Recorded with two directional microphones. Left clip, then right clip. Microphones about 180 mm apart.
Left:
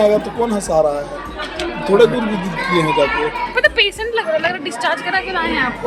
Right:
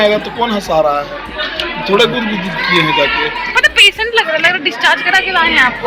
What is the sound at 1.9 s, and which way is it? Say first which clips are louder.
Speech: even; 10° left (ahead or behind).